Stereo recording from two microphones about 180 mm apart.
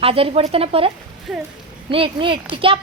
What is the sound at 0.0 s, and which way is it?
Speech, 30° right (ahead or behind).